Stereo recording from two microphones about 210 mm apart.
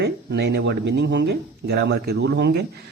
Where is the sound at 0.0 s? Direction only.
55° right (ahead or behind).